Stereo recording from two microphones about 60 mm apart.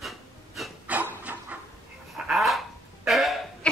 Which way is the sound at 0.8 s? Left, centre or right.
Right.